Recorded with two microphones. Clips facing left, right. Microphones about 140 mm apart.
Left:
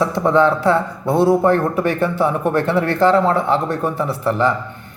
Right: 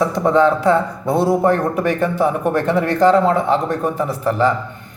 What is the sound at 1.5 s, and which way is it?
Speech, 40° right (ahead or behind).